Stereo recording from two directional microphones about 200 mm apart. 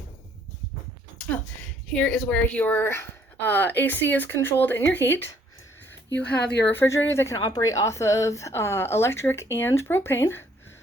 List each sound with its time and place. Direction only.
2.0 s a woman's voice: 5° left (ahead or behind)
6.1 s speech: 55° left (ahead or behind)
6.7 s a woman's voice: 10° left (ahead or behind)